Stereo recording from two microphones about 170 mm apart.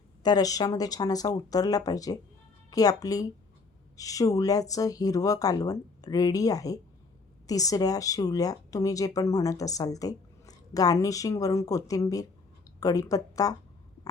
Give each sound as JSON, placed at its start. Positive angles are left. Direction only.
{"t": 0.2, "sound": "a woman's voice", "side_deg": 25}